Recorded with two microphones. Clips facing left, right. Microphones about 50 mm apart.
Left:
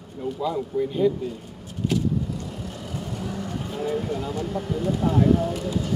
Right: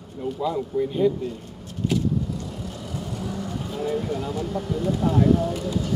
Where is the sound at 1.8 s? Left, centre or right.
Centre.